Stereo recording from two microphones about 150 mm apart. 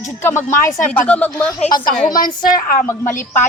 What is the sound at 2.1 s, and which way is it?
Speech, 25° left (ahead or behind).